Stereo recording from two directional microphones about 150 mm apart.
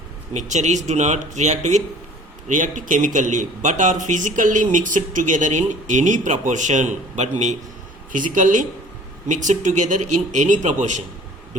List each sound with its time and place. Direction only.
0.3 s speech: 50° right (ahead or behind)